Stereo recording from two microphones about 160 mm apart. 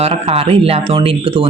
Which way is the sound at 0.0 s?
40° right (ahead or behind).